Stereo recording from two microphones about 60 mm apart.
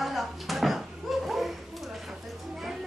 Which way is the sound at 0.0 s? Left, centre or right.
Centre.